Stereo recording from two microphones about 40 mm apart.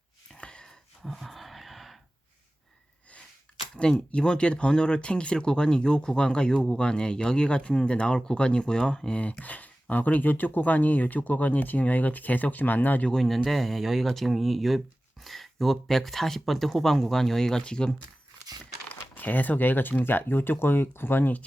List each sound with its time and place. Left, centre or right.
0.3 s a sound: left
1.0 s a sound: centre
3.8 s speech: left
9.4 s speech: left
13.4 s speech: centre
19.1 s speech: left